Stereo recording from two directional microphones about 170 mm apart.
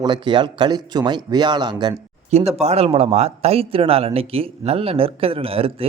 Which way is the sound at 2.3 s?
40° right (ahead or behind).